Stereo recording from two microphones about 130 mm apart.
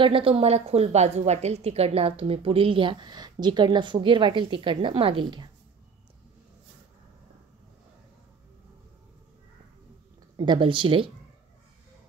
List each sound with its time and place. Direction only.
0.0 s a woman's voice: 45° right (ahead or behind)
10.3 s speech: 35° right (ahead or behind)